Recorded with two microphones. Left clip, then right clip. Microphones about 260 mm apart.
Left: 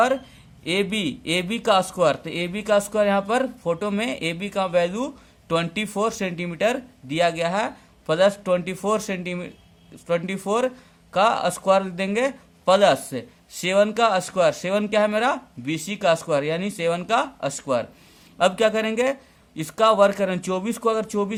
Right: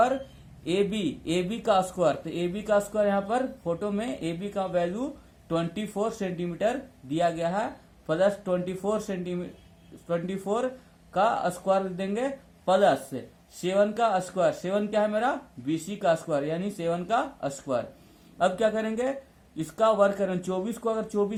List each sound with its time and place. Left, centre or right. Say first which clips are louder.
0.6 s a man's voice: left 3 dB; left